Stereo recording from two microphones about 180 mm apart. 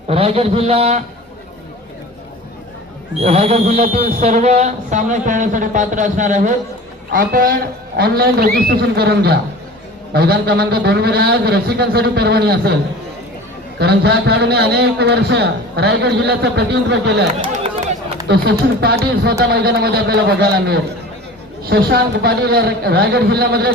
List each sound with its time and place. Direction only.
0.1 s a man's voice: 35° right (ahead or behind)
3.2 s a man's voice: 35° right (ahead or behind); by 12.7 s 60° right (ahead or behind)
13.7 s a man's voice: 65° right (ahead or behind)
18.3 s a man's voice: 65° right (ahead or behind)